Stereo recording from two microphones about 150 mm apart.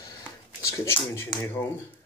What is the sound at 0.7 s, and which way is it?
A man's voice, 15° left (ahead or behind).